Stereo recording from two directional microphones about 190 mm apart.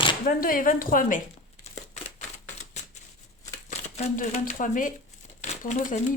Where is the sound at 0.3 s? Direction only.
50° left (ahead or behind).